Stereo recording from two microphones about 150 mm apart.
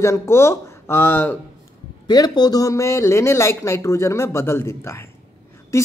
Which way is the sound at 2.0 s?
30° left (ahead or behind).